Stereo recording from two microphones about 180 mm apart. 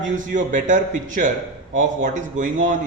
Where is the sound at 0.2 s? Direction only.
45° right (ahead or behind).